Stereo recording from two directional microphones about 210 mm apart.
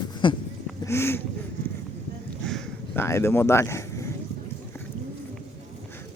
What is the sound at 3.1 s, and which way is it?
Speech, 10° left (ahead or behind).